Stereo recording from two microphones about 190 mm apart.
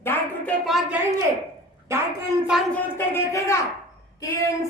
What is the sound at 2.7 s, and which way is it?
Speech, 10° left (ahead or behind).